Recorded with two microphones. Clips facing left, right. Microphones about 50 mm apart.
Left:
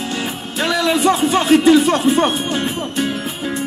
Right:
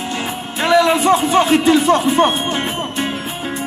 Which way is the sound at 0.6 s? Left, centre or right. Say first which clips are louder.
Right 3 dB; right.